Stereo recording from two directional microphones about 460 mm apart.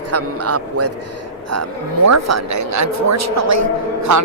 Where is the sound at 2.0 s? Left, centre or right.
Right.